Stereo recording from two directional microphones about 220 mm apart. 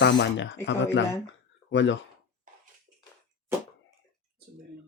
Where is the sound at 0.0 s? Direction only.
55° left (ahead or behind).